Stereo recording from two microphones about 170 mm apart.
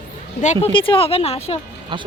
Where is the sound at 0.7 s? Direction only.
30° left (ahead or behind).